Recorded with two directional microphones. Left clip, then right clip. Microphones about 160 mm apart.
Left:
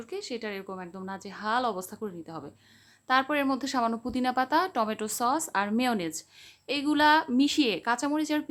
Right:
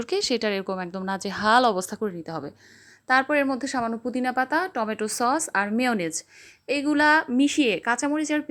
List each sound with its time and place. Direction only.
0.0 s a woman's voice: 50° right (ahead or behind)
3.1 s a woman's voice: 20° right (ahead or behind)